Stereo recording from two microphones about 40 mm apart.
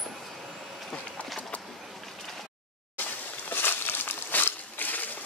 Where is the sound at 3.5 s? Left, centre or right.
Left.